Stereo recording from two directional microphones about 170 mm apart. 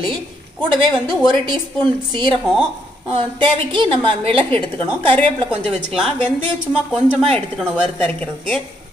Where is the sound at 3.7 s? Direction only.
30° right (ahead or behind).